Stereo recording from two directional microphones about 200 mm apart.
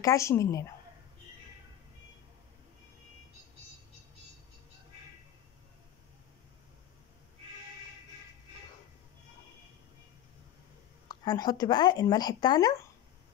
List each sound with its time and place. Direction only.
0.0 s a woman's voice: 15° left (ahead or behind)
11.1 s speech: 20° left (ahead or behind)